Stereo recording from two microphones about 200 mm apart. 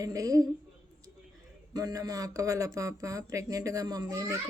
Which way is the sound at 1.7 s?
20° right (ahead or behind).